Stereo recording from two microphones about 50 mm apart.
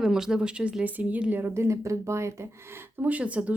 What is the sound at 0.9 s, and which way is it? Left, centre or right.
Speech, right.